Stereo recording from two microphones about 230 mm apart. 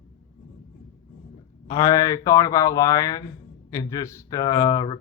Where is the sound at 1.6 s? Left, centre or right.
Centre.